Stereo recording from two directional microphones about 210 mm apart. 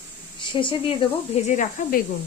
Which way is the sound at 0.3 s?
25° left (ahead or behind).